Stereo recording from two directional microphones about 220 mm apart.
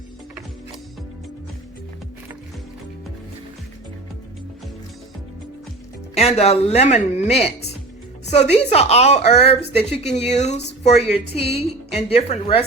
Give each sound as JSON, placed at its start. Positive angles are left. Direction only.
{"t": 6.1, "sound": "speech", "side_deg": 30}